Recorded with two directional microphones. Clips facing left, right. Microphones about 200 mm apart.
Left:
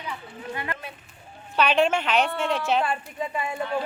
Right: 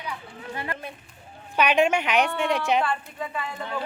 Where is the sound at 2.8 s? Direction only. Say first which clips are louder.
Left 1 dB; 20° left (ahead or behind).